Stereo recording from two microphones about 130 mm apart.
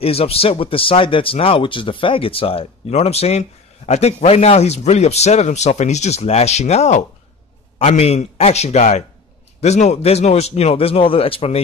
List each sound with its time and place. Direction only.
0.0 s a man's voice: 50° left (ahead or behind)